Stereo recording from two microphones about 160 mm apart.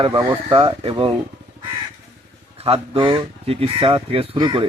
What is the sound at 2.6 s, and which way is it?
Speech, 35° right (ahead or behind).